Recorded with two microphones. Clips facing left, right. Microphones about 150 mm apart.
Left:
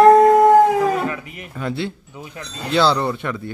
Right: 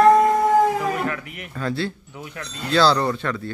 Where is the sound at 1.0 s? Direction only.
15° left (ahead or behind).